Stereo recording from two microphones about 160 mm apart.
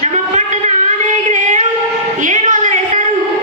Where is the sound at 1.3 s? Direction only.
50° right (ahead or behind).